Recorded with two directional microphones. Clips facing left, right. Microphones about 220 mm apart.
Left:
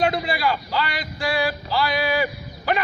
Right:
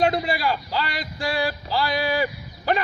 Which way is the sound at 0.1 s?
35° right (ahead or behind).